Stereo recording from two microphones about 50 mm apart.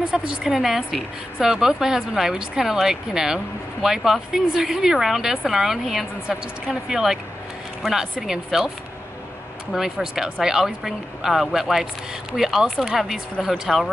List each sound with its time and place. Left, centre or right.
0.1 s a woman's voice: centre
0.5 s a woman's voice: centre